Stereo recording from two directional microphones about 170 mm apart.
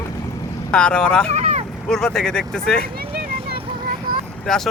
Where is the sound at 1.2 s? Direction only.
40° right (ahead or behind).